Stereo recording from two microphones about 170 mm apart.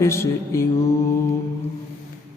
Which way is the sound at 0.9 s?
15° left (ahead or behind).